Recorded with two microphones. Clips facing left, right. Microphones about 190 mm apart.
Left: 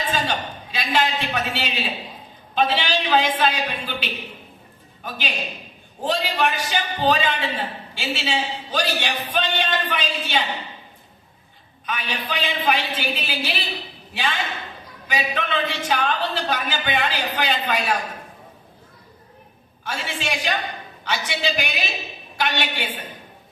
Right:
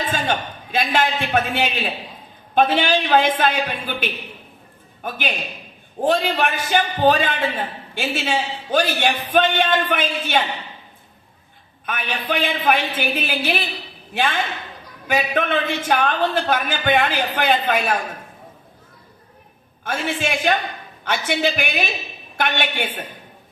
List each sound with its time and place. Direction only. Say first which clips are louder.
0.1 s a man's voice: right 2 dB; 55° right (ahead or behind)
11.9 s a man's voice: right 3 dB; 55° right (ahead or behind)
19.8 s a woman's voice: right 5 dB; 55° right (ahead or behind)